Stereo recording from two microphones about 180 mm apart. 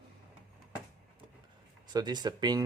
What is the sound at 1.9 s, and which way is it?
Speech, 25° right (ahead or behind).